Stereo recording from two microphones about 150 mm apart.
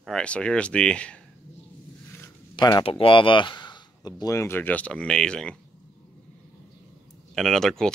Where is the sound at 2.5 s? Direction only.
25° left (ahead or behind); by 5.5 s 5° left (ahead or behind).